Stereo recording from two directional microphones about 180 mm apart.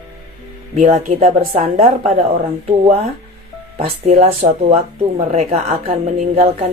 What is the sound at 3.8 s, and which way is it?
A woman's voice, 35° right (ahead or behind).